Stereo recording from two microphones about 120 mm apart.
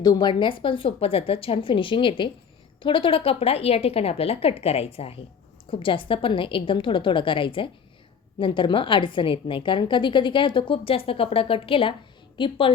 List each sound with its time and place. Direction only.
0.0 s a woman's voice: 35° left (ahead or behind)